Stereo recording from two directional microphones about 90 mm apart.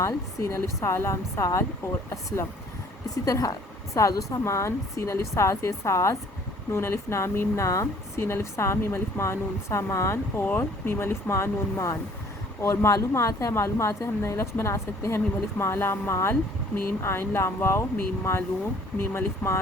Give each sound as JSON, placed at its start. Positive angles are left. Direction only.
{"t": 0.0, "sound": "a woman's voice", "side_deg": 35}
{"t": 19.1, "sound": "a woman's voice", "side_deg": 25}